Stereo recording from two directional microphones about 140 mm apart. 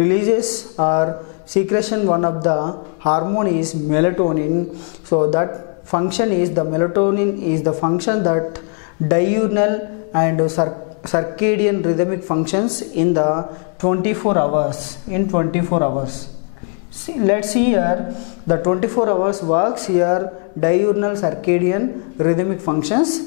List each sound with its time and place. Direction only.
0.0 s a man's voice: 10° left (ahead or behind)
17.3 s a man's voice: 5° left (ahead or behind)